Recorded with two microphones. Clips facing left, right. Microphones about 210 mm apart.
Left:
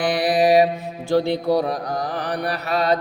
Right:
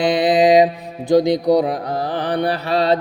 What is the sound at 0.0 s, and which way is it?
Mantra, 20° right (ahead or behind).